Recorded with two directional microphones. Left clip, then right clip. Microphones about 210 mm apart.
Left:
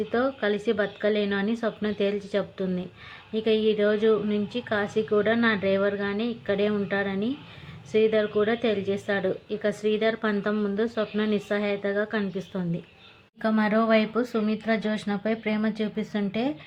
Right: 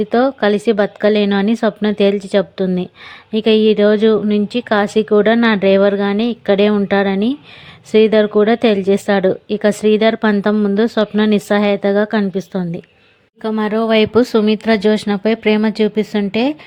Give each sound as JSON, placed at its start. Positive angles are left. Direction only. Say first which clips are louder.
{"t": 0.1, "sound": "speech", "louder": "right 12 dB", "side_deg": -45}
{"t": 13.4, "sound": "speech", "louder": "right 7 dB", "side_deg": -20}
{"t": 13.9, "sound": "speech", "louder": "right 11 dB", "side_deg": -40}